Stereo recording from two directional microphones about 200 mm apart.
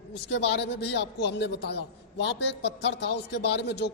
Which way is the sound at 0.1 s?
60° left (ahead or behind).